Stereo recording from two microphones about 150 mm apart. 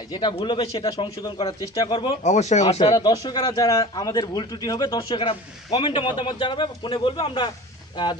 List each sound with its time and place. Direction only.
0.1 s speech: 30° left (ahead or behind)
2.2 s speech: 50° left (ahead or behind)
2.8 s speech: 25° left (ahead or behind)
5.2 s a man's voice: 35° left (ahead or behind)